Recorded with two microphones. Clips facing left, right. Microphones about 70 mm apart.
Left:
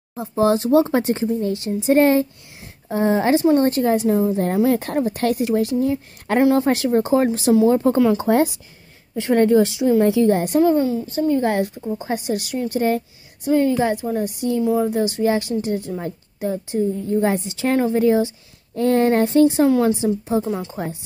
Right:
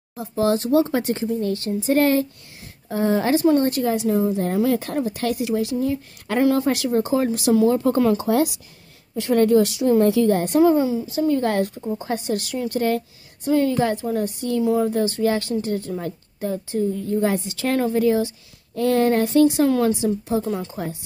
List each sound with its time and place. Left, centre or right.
0.1 s speech: left
7.5 s speech: left
10.4 s a woman's voice: centre
11.2 s speech: centre
12.0 s speech: centre
12.8 s a woman's voice: centre
15.0 s speech: centre